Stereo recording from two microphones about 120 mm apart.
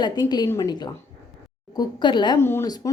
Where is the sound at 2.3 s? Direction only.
20° left (ahead or behind).